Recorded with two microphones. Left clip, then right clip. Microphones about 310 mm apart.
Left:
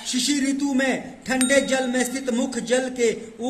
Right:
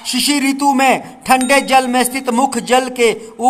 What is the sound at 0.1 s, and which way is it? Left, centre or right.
A man's voice, centre.